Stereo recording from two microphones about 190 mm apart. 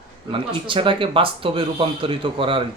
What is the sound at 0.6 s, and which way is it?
Speech, 25° right (ahead or behind).